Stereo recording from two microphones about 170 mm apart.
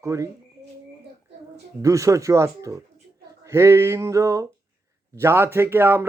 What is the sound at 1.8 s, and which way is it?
Speech, 20° right (ahead or behind).